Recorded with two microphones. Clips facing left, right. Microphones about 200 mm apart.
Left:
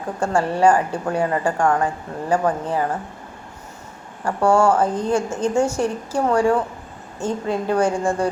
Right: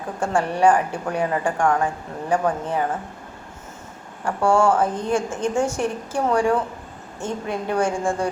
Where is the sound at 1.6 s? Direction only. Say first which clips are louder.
Left 1 dB; centre (ahead or behind).